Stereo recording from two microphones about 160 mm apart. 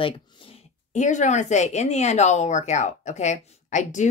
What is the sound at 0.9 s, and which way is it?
Speech, 50° left (ahead or behind).